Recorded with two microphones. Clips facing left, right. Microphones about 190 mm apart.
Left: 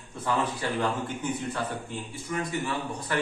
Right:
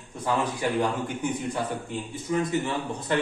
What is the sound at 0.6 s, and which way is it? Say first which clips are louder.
A man's voice: right 3 dB; 15° right (ahead or behind).